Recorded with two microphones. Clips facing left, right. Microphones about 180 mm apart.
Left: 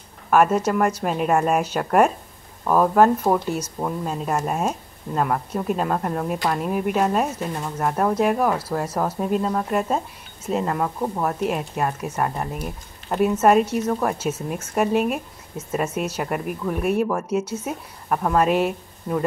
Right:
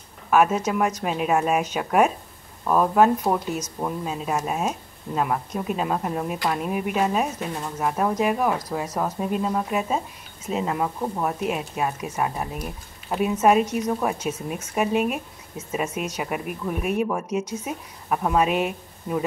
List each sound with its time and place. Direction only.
0.3 s speech: 5° right (ahead or behind)
3.5 s speech: 10° left (ahead or behind)
4.0 s speech: centre (ahead or behind)
8.8 s speech: 10° left (ahead or behind)
9.2 s a woman's voice: 5° right (ahead or behind)